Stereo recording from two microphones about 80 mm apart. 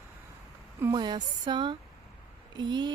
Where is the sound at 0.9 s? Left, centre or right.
Right.